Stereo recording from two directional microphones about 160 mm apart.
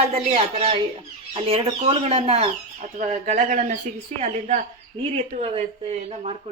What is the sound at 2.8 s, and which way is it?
Speech, 50° right (ahead or behind).